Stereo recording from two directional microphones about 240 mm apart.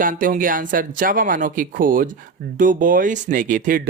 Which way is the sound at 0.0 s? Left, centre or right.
Right.